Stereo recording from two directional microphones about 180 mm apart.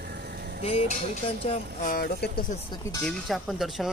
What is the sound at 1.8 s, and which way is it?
Speech, 60° left (ahead or behind).